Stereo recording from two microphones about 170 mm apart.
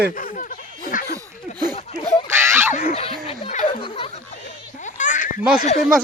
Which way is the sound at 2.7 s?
40° left (ahead or behind).